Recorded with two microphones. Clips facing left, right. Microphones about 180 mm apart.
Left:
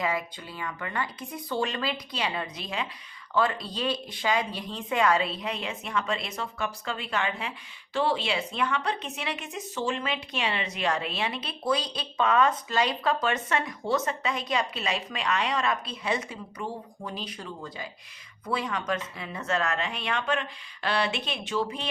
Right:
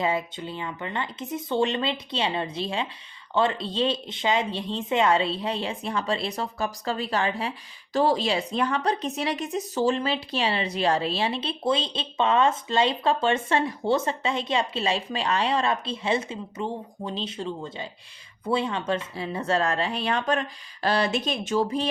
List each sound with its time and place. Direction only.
0.0 s a woman's voice: 25° right (ahead or behind)